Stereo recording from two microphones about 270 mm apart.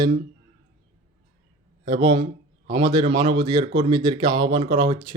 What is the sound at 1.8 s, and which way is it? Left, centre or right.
Speech, centre.